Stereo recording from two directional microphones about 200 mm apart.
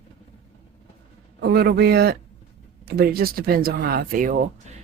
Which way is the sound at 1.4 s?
55° right (ahead or behind).